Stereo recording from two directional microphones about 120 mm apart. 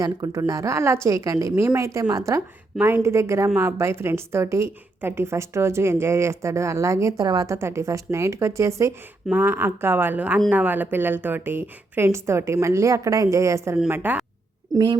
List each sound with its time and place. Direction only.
0.0 s a woman's voice: 30° right (ahead or behind)
13.9 s speech: 15° right (ahead or behind)